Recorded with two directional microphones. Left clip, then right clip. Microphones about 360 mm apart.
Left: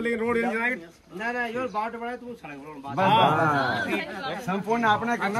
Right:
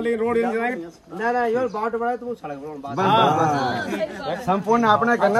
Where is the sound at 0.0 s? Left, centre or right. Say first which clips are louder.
Right 4 dB; centre.